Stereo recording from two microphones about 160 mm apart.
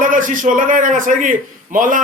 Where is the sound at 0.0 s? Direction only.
55° right (ahead or behind).